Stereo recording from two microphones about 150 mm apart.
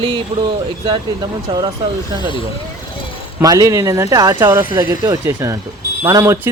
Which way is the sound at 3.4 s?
25° right (ahead or behind).